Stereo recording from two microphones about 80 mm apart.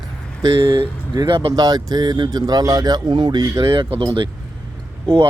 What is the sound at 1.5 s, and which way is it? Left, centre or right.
Speech, right.